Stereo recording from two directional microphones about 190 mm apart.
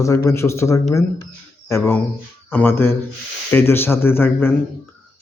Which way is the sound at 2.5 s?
10° left (ahead or behind).